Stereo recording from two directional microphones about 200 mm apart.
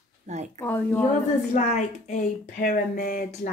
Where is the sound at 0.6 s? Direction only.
10° left (ahead or behind).